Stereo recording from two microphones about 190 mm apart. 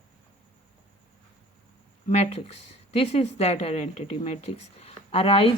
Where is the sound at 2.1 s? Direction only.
35° left (ahead or behind).